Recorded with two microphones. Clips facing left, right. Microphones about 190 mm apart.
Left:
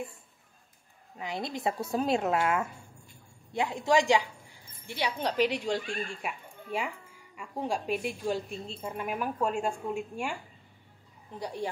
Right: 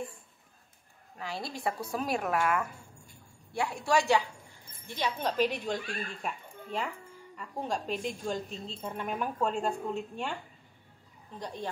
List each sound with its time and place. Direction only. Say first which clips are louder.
1.1 s a woman's voice: left 3 dB; 20° left (ahead or behind)